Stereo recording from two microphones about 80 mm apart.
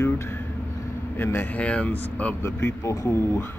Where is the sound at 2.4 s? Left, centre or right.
Left.